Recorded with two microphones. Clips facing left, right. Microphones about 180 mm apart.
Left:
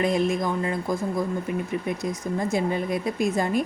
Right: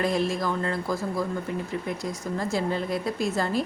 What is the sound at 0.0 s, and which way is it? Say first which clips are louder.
A woman's voice: left 2 dB; 20° left (ahead or behind).